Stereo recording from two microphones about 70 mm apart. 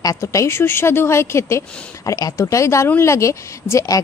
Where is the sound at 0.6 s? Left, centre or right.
Left.